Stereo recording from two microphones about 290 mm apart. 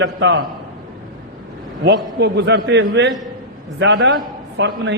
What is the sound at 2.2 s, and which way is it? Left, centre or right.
A man's voice, right.